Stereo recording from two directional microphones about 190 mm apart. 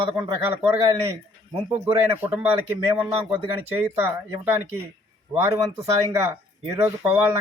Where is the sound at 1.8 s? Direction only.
10° right (ahead or behind).